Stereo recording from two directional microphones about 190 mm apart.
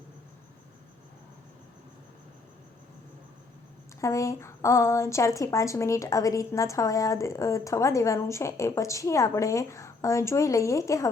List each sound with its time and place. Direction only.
4.0 s a woman's voice: 15° left (ahead or behind)